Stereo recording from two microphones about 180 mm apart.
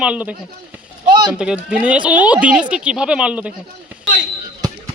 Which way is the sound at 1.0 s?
25° right (ahead or behind).